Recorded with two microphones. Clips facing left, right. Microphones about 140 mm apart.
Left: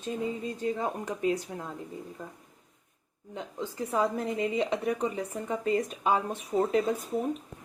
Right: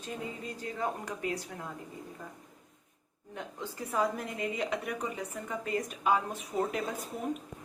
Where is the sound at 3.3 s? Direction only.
15° left (ahead or behind).